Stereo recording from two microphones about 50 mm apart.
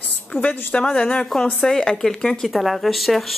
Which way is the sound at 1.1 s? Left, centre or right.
Centre.